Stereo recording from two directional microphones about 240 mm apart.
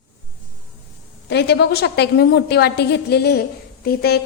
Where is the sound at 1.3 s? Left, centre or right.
Left.